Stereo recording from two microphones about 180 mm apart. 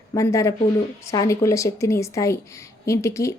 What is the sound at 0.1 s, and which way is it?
A woman's voice, 15° left (ahead or behind).